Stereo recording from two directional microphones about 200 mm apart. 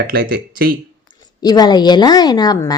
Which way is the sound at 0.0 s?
50° right (ahead or behind).